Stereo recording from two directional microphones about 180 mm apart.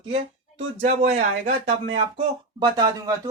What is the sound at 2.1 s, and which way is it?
Speech, 25° right (ahead or behind).